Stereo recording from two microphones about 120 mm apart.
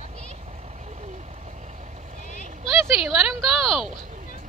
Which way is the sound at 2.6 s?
45° left (ahead or behind).